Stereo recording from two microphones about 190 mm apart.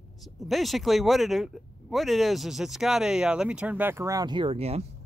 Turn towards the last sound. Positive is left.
turn(degrees=-30)  # may be behind; listen again after turning